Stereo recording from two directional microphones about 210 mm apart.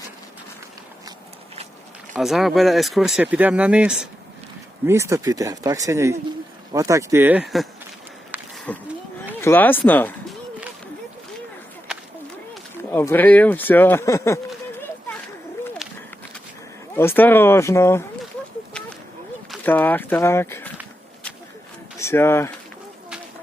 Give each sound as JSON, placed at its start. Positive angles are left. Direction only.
{"t": 2.1, "sound": "speech", "side_deg": 0}
{"t": 8.3, "sound": "a sound", "side_deg": -10}
{"t": 8.7, "sound": "speech", "side_deg": 5}
{"t": 12.7, "sound": "speech", "side_deg": 10}
{"t": 16.9, "sound": "speech", "side_deg": 10}
{"t": 19.5, "sound": "speech", "side_deg": 10}
{"t": 21.9, "sound": "speech", "side_deg": 10}